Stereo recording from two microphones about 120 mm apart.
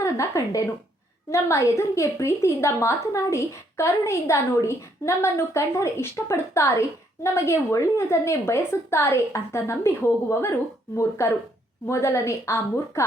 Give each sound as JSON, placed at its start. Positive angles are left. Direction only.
{"t": 0.0, "sound": "a woman's voice", "side_deg": 25}